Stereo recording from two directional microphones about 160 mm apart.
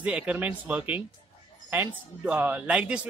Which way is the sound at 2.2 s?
10° right (ahead or behind).